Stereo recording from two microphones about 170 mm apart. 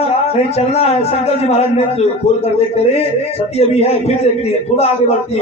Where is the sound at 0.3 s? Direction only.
40° left (ahead or behind).